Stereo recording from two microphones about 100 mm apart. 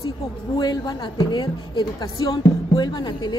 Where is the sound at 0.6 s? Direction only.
45° left (ahead or behind).